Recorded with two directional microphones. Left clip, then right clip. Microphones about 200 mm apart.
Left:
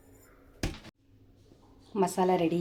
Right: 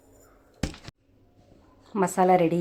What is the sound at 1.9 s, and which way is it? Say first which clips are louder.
Speech: right 6 dB; 10° right (ahead or behind).